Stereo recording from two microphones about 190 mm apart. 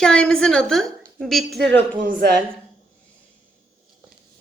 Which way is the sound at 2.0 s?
45° right (ahead or behind).